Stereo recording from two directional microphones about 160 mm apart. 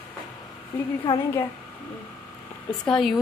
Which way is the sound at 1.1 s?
20° left (ahead or behind).